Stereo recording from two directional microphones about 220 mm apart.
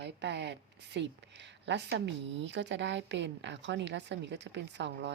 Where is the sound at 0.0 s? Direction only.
50° right (ahead or behind).